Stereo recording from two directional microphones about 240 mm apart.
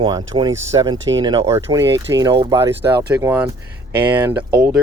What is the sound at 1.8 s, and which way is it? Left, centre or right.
Speech, right.